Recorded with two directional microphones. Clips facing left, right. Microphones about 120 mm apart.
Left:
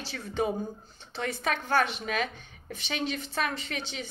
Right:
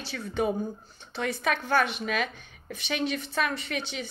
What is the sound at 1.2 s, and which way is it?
A woman's voice, 35° left (ahead or behind).